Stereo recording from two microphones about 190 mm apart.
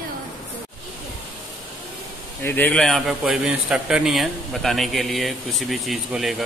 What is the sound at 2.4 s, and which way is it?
A man's voice, 10° left (ahead or behind).